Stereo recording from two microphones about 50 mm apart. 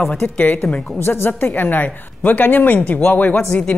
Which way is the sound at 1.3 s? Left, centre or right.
Left.